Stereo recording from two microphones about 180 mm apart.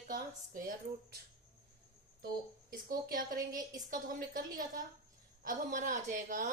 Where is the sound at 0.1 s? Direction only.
50° right (ahead or behind).